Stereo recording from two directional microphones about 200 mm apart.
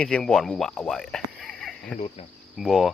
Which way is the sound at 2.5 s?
Centre (ahead or behind).